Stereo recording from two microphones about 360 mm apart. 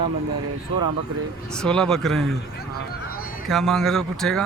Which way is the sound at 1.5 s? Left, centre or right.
Centre.